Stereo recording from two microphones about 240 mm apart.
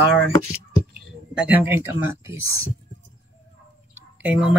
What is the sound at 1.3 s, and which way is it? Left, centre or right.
Speech, centre.